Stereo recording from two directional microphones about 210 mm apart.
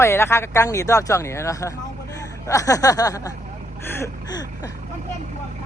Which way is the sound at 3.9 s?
15° left (ahead or behind).